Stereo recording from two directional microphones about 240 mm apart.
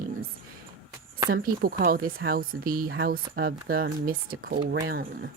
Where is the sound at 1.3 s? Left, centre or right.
Right.